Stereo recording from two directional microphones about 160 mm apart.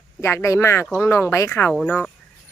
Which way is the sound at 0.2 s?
15° left (ahead or behind).